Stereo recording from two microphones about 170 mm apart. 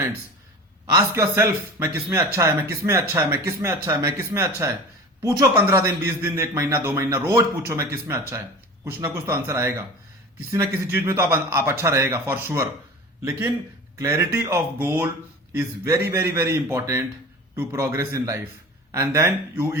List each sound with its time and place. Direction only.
0.9 s speech: 15° right (ahead or behind)
8.8 s speech: 15° right (ahead or behind)
14.0 s speech: 15° right (ahead or behind)